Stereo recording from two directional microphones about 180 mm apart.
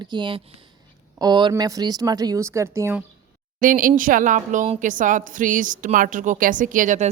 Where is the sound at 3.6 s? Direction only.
50° right (ahead or behind).